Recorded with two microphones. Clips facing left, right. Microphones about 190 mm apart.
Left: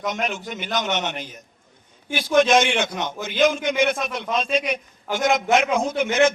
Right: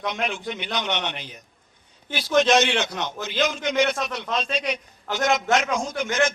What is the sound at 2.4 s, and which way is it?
Speech, 50° left (ahead or behind).